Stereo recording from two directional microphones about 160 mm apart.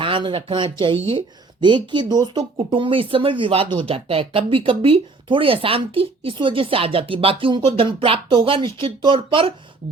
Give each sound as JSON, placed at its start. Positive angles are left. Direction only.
{"t": 0.0, "sound": "speech", "side_deg": -30}